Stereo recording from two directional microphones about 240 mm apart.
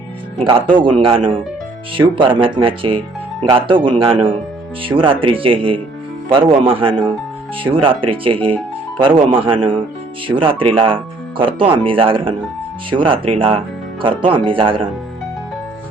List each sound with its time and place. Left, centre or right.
0.3 s speech: right